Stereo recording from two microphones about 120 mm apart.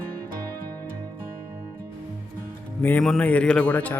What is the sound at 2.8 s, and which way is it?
Speech, 15° left (ahead or behind).